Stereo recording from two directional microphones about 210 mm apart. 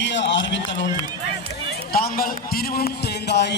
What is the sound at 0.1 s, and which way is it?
Run, 60° left (ahead or behind).